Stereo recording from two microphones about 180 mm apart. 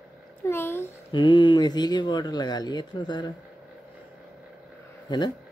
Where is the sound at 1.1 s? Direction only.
25° left (ahead or behind).